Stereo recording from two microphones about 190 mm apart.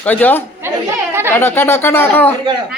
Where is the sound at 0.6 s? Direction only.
10° right (ahead or behind).